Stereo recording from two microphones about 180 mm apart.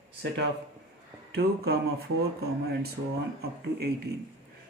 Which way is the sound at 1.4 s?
60° right (ahead or behind).